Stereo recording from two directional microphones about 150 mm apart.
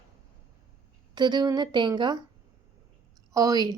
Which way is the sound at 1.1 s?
30° right (ahead or behind).